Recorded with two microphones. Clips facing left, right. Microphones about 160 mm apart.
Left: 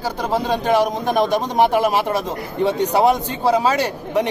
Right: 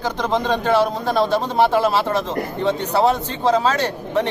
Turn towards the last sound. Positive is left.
turn(degrees=10)  # may be behind; listen again after turning